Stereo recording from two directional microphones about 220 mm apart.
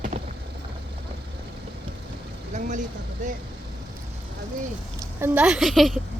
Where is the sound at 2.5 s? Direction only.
35° right (ahead or behind).